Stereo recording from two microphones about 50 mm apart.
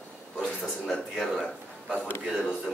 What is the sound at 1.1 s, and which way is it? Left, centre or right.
Speech, centre.